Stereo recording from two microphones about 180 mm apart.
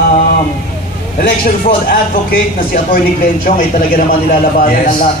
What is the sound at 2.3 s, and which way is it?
A man's voice, 50° left (ahead or behind).